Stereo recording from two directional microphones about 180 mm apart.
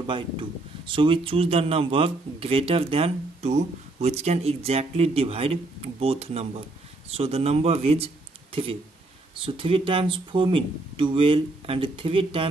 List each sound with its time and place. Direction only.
0.0 s speech: 25° right (ahead or behind)